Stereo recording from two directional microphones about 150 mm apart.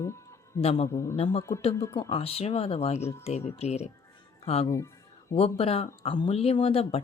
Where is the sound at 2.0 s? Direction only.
40° left (ahead or behind).